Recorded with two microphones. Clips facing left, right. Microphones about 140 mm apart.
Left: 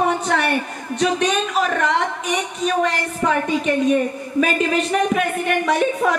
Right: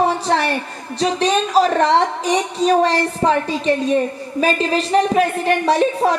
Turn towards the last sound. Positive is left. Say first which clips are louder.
# right 3 dB
turn(degrees=-30)  # may be behind; listen again after turning